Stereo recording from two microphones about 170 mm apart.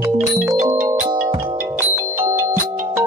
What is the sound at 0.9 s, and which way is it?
Music, 35° right (ahead or behind).